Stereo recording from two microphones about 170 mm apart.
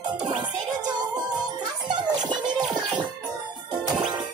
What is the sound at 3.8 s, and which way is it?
Music, 25° right (ahead or behind).